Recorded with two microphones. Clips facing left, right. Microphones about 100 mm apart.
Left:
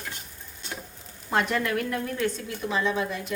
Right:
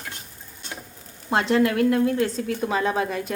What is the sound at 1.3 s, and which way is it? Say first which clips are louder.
Speech: right 5 dB; 30° right (ahead or behind).